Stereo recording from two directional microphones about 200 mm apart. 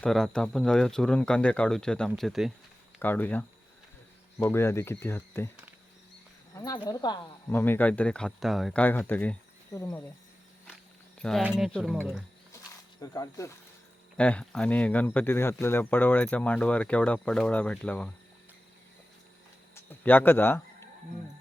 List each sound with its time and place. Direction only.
0.0 s speech: 5° left (ahead or behind)
6.7 s speech: 20° left (ahead or behind)
11.2 s speech: centre (ahead or behind)
13.0 s speech: 15° left (ahead or behind)
14.2 s speech: 5° left (ahead or behind)
19.7 s speech: 10° left (ahead or behind)